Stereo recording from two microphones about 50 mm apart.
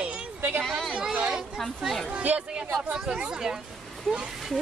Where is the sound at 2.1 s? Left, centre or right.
Right.